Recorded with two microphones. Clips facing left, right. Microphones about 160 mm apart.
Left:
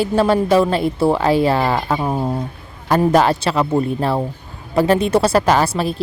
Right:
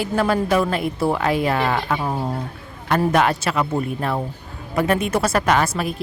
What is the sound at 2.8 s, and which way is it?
A woman's voice, 30° left (ahead or behind).